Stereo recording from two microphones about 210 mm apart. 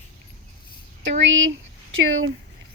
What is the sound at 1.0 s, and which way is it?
Speech, 60° right (ahead or behind).